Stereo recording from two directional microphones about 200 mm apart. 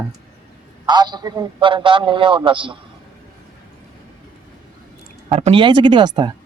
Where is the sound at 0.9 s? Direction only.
20° right (ahead or behind).